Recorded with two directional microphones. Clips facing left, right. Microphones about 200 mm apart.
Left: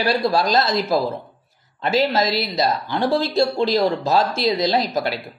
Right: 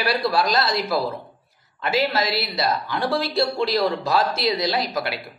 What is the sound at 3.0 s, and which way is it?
Speech, 25° left (ahead or behind).